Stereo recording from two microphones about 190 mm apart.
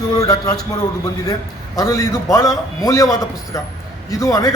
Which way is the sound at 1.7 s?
15° left (ahead or behind).